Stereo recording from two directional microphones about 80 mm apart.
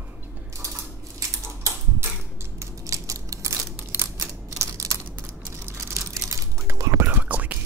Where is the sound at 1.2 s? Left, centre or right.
Right.